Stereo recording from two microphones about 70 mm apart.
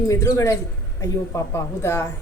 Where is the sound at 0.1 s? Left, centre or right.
Left.